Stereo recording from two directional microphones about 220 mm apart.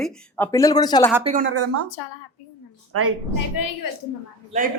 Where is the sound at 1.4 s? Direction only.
90° right.